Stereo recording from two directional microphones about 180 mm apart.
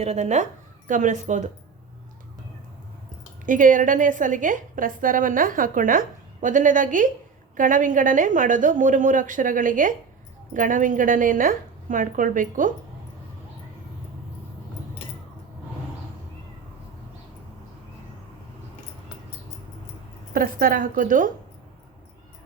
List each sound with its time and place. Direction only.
0.0 s speech: 40° right (ahead or behind)
3.4 s a woman's voice: 45° right (ahead or behind)
20.3 s a woman's voice: 50° right (ahead or behind)